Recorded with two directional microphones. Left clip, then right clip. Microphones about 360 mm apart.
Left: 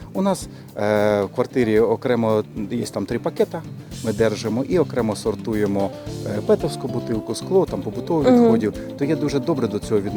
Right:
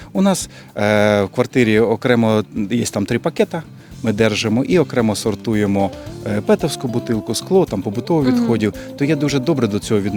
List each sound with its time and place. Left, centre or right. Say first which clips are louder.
0.8 s speech: right 4 dB; right